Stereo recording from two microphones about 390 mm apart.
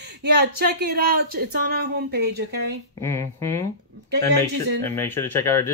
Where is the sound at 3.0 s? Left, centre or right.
Centre.